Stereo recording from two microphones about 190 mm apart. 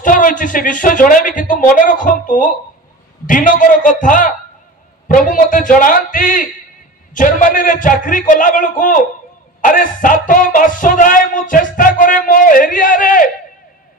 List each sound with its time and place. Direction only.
0.0 s speech: 45° left (ahead or behind)